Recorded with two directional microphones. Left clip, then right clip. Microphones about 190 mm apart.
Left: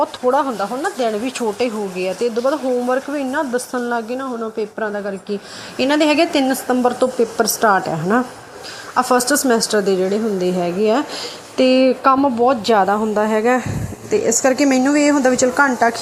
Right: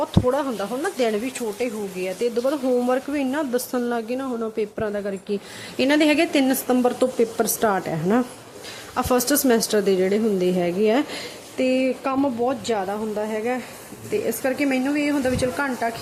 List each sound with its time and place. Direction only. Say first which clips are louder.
0.0 s speech: left 6 dB; 15° right (ahead or behind)
1.2 s speech: left 6 dB; centre (ahead or behind)
2.4 s a woman's voice: left 2 dB; 20° right (ahead or behind)
11.5 s speech: left 8 dB; 5° left (ahead or behind)